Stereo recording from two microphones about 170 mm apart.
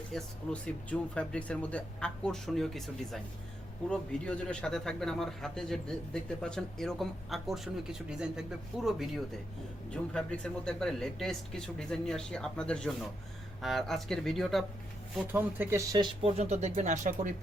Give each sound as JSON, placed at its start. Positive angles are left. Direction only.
{"t": 0.1, "sound": "speech", "side_deg": 5}
{"t": 15.3, "sound": "speech", "side_deg": -10}
{"t": 16.2, "sound": "speech", "side_deg": -40}